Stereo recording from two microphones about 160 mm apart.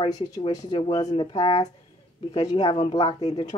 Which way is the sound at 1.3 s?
45° left (ahead or behind).